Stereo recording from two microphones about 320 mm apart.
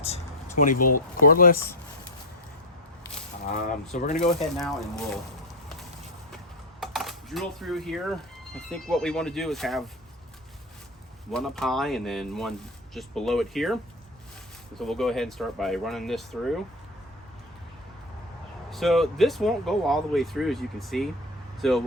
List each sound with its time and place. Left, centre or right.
1.2 s speech: left
3.4 s speech: left
4.5 s speech: centre
6.3 s speech: centre
11.3 s speech: centre
14.8 s speech: centre
18.7 s speech: centre